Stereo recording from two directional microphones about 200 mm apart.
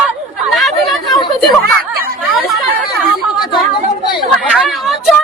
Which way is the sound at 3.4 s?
Centre (ahead or behind).